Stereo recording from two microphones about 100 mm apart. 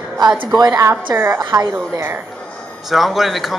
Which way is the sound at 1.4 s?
45° right (ahead or behind).